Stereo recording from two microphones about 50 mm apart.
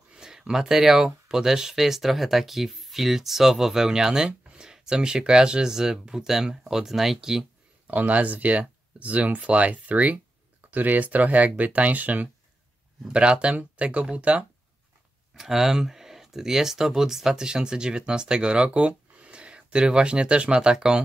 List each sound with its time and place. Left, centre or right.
0.1 s speech: centre
7.8 s speech: right
13.1 s speech: right
15.3 s speech: centre